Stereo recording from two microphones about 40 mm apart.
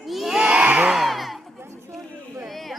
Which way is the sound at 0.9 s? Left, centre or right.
Centre.